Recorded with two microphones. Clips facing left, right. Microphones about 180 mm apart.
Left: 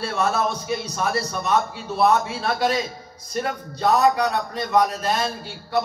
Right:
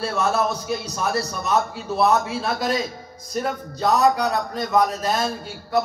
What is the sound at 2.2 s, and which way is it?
A man's voice, centre (ahead or behind).